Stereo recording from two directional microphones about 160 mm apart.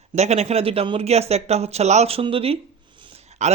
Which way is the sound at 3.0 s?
30° right (ahead or behind).